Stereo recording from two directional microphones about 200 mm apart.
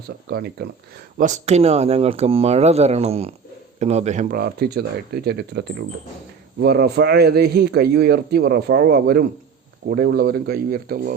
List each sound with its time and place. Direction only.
0.3 s a man's voice: 55° right (ahead or behind)
1.2 s a man's voice: 35° right (ahead or behind)